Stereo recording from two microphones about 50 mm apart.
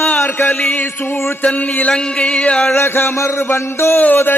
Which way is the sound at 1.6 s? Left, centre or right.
Left.